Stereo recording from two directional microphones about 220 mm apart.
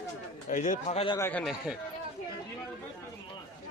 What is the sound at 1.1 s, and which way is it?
Speech, 10° left (ahead or behind).